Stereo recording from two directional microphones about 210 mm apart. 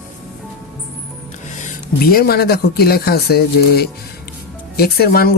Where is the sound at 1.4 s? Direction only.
35° left (ahead or behind).